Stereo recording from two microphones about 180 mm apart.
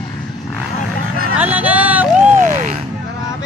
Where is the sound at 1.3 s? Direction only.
10° right (ahead or behind).